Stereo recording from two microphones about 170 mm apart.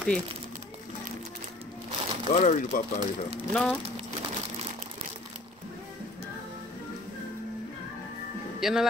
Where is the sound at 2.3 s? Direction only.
45° left (ahead or behind).